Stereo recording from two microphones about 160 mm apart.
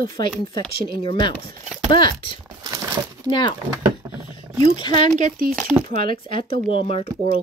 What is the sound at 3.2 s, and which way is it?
Speech, 30° left (ahead or behind).